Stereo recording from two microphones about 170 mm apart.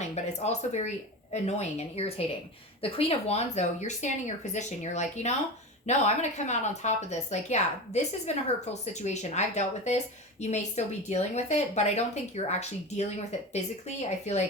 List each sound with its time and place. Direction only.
0.0 s a woman's voice: 40° left (ahead or behind)